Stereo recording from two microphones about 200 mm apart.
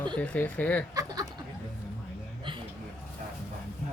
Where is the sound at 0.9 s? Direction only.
20° right (ahead or behind).